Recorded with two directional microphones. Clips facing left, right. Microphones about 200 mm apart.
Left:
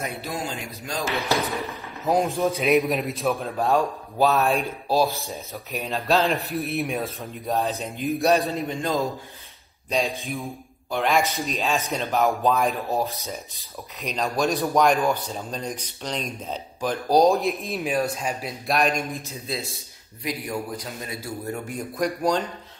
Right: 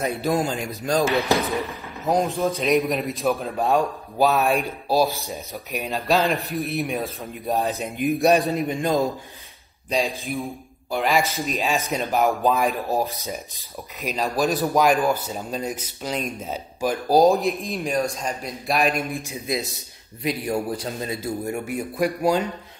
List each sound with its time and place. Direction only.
0.4 s a man's voice: 45° right (ahead or behind)
1.7 s speech: centre (ahead or behind)
7.4 s a man's voice: 15° right (ahead or behind)
9.8 s speech: centre (ahead or behind)
11.9 s a man's voice: 15° right (ahead or behind)
12.2 s speech: centre (ahead or behind)
12.9 s a man's voice: 15° right (ahead or behind)
14.0 s speech: 5° right (ahead or behind)
20.2 s a man's voice: 30° right (ahead or behind)
21.6 s a man's voice: 5° right (ahead or behind)